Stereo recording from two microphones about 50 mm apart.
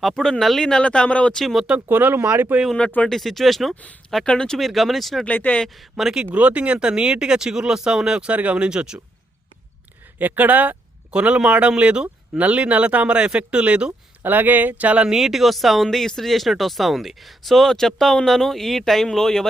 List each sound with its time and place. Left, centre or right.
0.0 s speech: centre
1.4 s speech: centre
1.9 s speech: right
3.1 s speech: centre
4.3 s speech: centre
4.5 s speech: centre
5.2 s speech: left
5.6 s speech: centre
6.3 s speech: right
8.3 s speech: right
10.2 s a man's voice: right
14.2 s speech: right
15.0 s speech: centre